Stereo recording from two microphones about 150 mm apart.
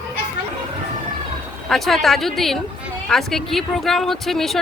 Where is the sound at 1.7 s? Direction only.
Centre (ahead or behind).